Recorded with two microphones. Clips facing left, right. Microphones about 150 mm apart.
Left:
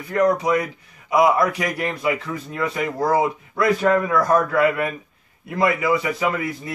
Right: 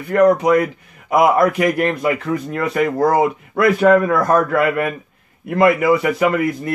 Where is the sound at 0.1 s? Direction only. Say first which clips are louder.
Right 6 dB; 60° right (ahead or behind).